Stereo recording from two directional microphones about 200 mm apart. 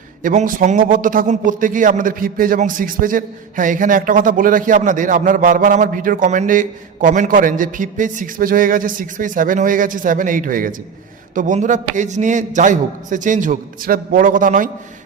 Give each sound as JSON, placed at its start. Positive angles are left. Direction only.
{"t": 0.2, "sound": "a man's voice", "side_deg": -40}